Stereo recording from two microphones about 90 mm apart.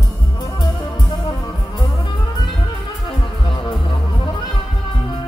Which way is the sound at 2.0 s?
65° left (ahead or behind).